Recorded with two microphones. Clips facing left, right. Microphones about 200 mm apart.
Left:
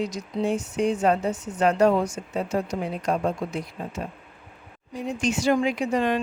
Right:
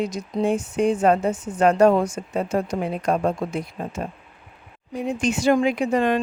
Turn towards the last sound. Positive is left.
turn(degrees=-55)  # may be behind; listen again after turning